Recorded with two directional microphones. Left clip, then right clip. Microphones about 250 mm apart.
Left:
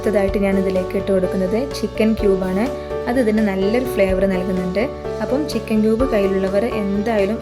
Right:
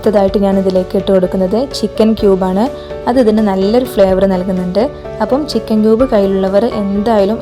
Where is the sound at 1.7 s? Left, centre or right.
Right.